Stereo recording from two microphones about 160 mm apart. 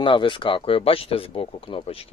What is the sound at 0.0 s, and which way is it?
A man's voice, 30° left (ahead or behind).